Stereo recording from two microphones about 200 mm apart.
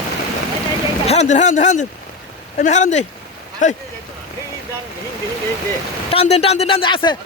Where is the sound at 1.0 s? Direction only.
35° left (ahead or behind).